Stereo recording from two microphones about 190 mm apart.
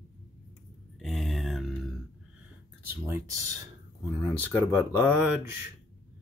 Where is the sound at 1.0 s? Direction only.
Centre (ahead or behind).